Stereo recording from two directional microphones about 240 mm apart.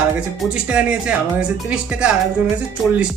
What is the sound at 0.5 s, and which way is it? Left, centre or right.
Speech, centre.